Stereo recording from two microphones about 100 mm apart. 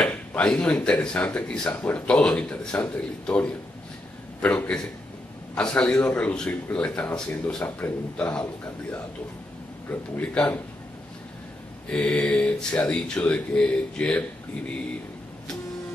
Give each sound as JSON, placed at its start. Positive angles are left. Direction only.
{"t": 0.0, "sound": "speech", "side_deg": 15}
{"t": 9.8, "sound": "speech", "side_deg": 15}
{"t": 11.9, "sound": "speech", "side_deg": 10}